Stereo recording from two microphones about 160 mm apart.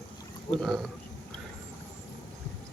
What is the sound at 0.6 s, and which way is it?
Speech, 5° left (ahead or behind).